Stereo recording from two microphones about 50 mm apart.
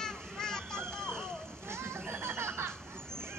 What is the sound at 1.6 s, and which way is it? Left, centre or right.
Children playing, right.